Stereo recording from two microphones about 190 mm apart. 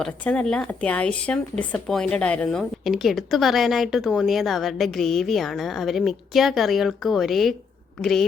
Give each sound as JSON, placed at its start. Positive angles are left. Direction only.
{"t": 0.0, "sound": "speech", "side_deg": 5}